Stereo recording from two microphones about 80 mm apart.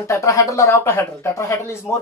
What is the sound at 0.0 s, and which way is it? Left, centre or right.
Speech, left.